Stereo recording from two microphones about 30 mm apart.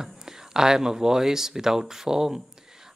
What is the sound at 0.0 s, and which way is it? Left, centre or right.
Speech, right.